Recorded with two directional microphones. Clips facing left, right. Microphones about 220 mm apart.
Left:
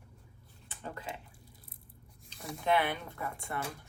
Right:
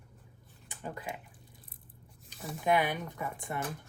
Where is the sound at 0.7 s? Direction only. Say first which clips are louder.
Right 2 dB; 10° right (ahead or behind).